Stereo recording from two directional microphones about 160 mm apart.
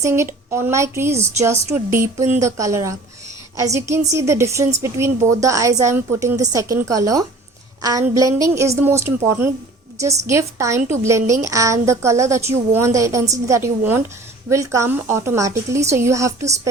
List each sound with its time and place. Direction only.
0.0 s a woman's voice: 15° right (ahead or behind)